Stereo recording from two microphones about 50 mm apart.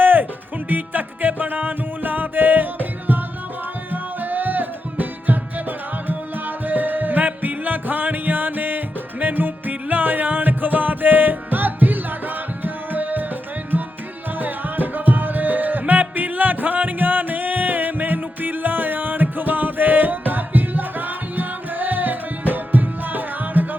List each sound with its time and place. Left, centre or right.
0.0 s music: right
14.3 s music: right